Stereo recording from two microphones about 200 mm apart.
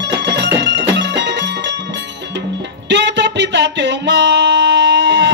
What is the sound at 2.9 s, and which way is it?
Music, 60° right (ahead or behind).